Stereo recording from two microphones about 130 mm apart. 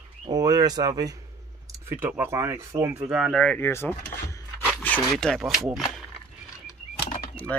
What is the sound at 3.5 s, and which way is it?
Mechanisms, 15° left (ahead or behind).